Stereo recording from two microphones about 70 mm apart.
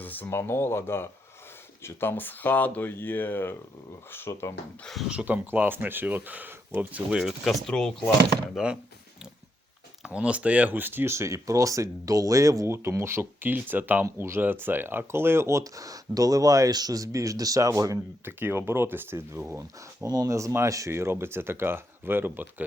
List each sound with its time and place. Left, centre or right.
0.0 s a sound: left
0.3 s speech: left
5.2 s speech: right
7.1 s speech: centre
7.7 s speech: centre
8.5 s speech: centre
10.0 s speech: centre
14.0 s speech: right
17.9 s speech: right
20.1 s speech: right
20.3 s speech: right